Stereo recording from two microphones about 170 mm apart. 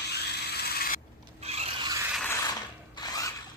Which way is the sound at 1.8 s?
20° right (ahead or behind).